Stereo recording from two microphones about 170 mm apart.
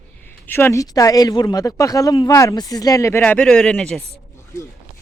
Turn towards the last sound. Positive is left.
turn(degrees=5)  # may be behind; listen again after turning